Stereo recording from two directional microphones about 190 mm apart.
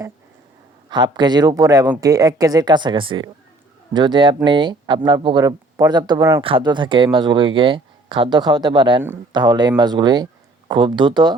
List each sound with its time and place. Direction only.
0.9 s speech: 25° right (ahead or behind)